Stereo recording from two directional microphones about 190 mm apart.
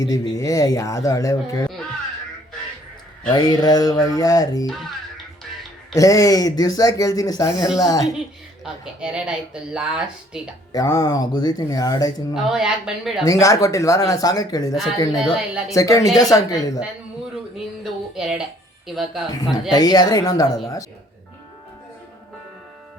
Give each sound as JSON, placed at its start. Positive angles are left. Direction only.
{"t": 0.0, "sound": "speech", "side_deg": 15}
{"t": 3.3, "sound": "speech", "side_deg": 20}
{"t": 4.6, "sound": "music", "side_deg": 0}
{"t": 5.9, "sound": "speech", "side_deg": 20}
{"t": 8.6, "sound": "speech", "side_deg": -5}
{"t": 10.7, "sound": "speech", "side_deg": 15}
{"t": 12.3, "sound": "speech", "side_deg": 0}
{"t": 13.4, "sound": "speech", "side_deg": 15}
{"t": 15.1, "sound": "speech", "side_deg": 0}
{"t": 15.7, "sound": "speech", "side_deg": 15}
{"t": 17.8, "sound": "music", "side_deg": 0}
{"t": 18.9, "sound": "speech", "side_deg": 0}
{"t": 19.7, "sound": "speech", "side_deg": 20}